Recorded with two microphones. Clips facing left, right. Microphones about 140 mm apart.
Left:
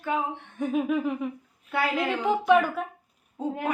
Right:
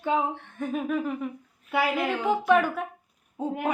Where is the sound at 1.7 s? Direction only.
10° right (ahead or behind).